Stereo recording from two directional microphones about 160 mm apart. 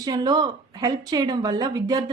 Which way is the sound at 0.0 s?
25° right (ahead or behind).